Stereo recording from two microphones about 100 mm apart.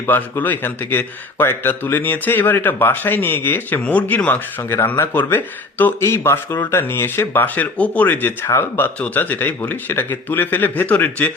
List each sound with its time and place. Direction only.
0.0 s speech: 20° left (ahead or behind)